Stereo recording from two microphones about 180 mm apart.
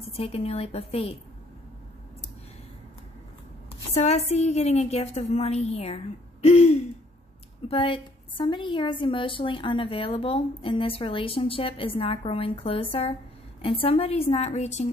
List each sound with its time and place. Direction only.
0.0 s a woman's voice: 35° left (ahead or behind)
4.0 s a woman's voice: 35° left (ahead or behind)
6.4 s hoot: 35° left (ahead or behind)
7.6 s a woman's voice: 30° left (ahead or behind)